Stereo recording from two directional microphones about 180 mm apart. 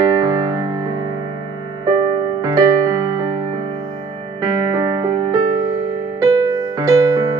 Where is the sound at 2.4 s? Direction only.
20° right (ahead or behind).